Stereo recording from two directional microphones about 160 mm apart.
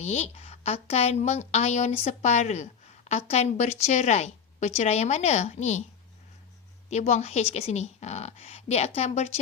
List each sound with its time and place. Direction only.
0.0 s a woman's voice: 45° left (ahead or behind)
6.9 s a woman's voice: 45° left (ahead or behind)